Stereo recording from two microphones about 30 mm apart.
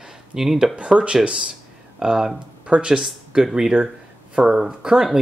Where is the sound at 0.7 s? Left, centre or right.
Right.